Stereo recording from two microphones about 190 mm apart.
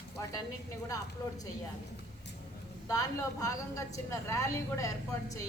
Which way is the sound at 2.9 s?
15° left (ahead or behind).